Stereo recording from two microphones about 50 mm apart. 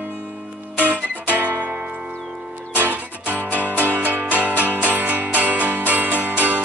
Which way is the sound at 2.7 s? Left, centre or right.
Right.